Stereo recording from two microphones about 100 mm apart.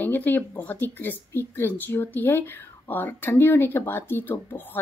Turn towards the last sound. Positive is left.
turn(degrees=20)  # may be behind; listen again after turning